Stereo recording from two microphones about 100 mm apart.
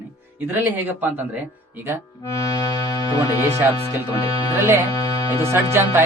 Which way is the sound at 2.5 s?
40° left (ahead or behind).